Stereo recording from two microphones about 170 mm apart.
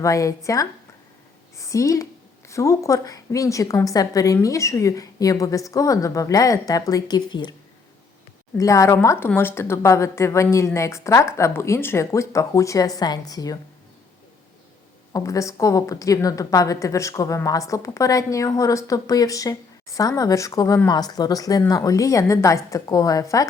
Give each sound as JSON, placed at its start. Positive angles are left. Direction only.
{"t": 0.0, "sound": "a woman's voice", "side_deg": 20}
{"t": 8.5, "sound": "speech", "side_deg": 20}
{"t": 15.1, "sound": "a woman's voice", "side_deg": 20}